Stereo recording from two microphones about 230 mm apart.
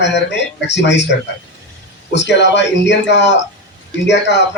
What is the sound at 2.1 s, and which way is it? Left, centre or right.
Speech, left.